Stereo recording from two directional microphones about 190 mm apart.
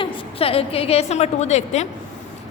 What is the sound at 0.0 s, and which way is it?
A woman's voice, 30° left (ahead or behind).